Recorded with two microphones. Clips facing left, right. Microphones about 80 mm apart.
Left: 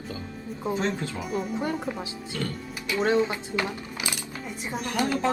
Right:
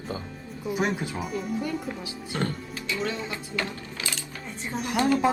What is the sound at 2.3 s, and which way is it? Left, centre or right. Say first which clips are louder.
Speech: right 3 dB; right.